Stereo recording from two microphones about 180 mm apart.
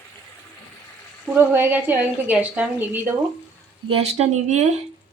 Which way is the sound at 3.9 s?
35° right (ahead or behind).